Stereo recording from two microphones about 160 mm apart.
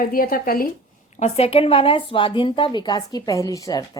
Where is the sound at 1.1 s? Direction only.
40° left (ahead or behind); by 4.0 s 20° left (ahead or behind).